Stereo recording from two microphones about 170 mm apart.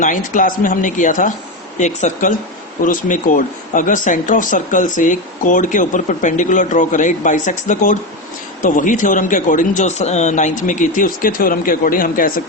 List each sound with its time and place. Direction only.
0.0 s speech: 50° left (ahead or behind)